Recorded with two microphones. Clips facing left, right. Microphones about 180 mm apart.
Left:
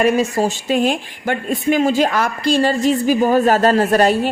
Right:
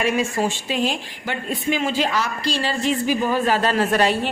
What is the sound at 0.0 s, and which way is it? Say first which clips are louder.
Speech: left 5 dB; 40° left (ahead or behind).